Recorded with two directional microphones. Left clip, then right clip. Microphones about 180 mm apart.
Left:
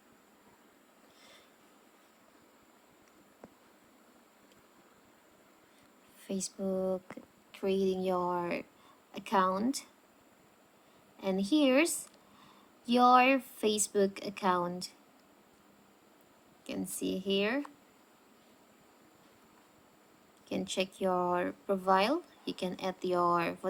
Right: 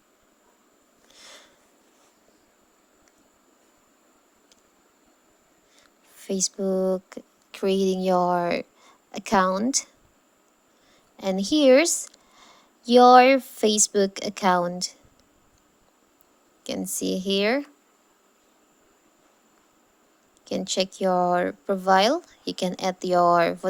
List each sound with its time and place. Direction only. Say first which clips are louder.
1.1 s sniff: right 12 dB; 50° right (ahead or behind)
6.1 s a woman's voice: right 12 dB; 35° right (ahead or behind)
11.2 s a woman's voice: right 8 dB; 40° right (ahead or behind)
16.6 s a woman's voice: right 9 dB; 45° right (ahead or behind)
20.6 s speech: right 8 dB; 35° right (ahead or behind)